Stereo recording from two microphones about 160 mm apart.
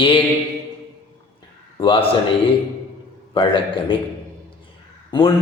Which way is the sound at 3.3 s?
30° left (ahead or behind).